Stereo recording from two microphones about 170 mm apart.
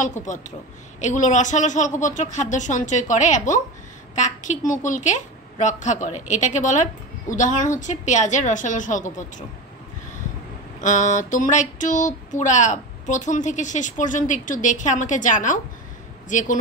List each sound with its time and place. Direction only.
0.0 s a woman's voice: 45° left (ahead or behind)
10.8 s a woman's voice: 45° left (ahead or behind)